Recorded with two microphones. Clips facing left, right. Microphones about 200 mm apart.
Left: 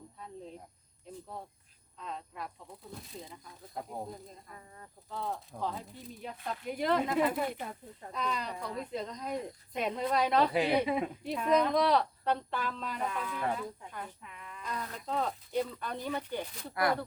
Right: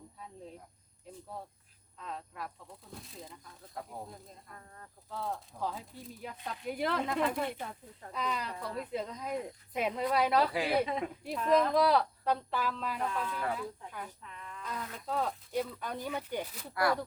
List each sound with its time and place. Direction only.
2.0 s speech: centre (ahead or behind)
3.8 s speech: 20° left (ahead or behind)
4.1 s speech: 5° left (ahead or behind)
5.0 s speech: centre (ahead or behind)
10.5 s speech: 20° left (ahead or behind)
11.2 s speech: centre (ahead or behind)
14.7 s speech: 5° right (ahead or behind)
16.7 s speech: 20° left (ahead or behind)